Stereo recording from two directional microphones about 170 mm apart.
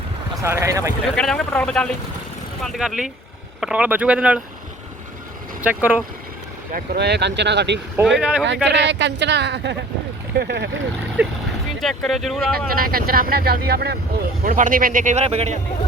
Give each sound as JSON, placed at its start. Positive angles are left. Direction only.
{"t": 0.4, "sound": "speech", "side_deg": -15}
{"t": 1.0, "sound": "a man's voice", "side_deg": 5}
{"t": 5.6, "sound": "speech", "side_deg": -10}
{"t": 6.7, "sound": "speech", "side_deg": -75}
{"t": 8.0, "sound": "a man's voice", "side_deg": 0}
{"t": 8.6, "sound": "speech", "side_deg": -90}
{"t": 10.3, "sound": "speech", "side_deg": -75}
{"t": 11.2, "sound": "speech", "side_deg": -10}
{"t": 11.8, "sound": "a man's voice", "side_deg": 0}
{"t": 12.5, "sound": "speech", "side_deg": -60}
{"t": 14.4, "sound": "speech", "side_deg": -55}